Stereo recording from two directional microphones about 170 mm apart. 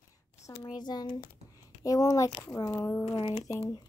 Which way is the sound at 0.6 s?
25° left (ahead or behind).